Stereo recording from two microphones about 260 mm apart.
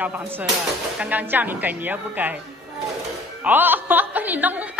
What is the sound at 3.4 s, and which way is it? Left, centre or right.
Music, centre.